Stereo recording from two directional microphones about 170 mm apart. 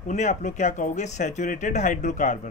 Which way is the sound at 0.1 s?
45° left (ahead or behind).